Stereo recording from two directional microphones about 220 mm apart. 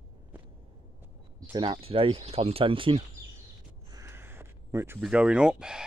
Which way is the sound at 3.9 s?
10° right (ahead or behind).